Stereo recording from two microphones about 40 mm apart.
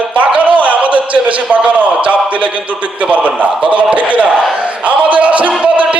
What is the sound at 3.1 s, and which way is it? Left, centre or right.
A man's voice, right.